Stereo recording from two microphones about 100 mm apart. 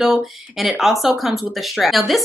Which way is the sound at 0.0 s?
Centre (ahead or behind).